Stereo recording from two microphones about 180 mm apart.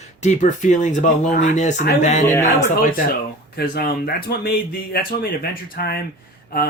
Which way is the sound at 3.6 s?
60° left (ahead or behind).